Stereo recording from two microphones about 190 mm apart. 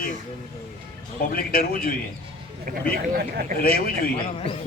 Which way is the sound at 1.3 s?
50° left (ahead or behind).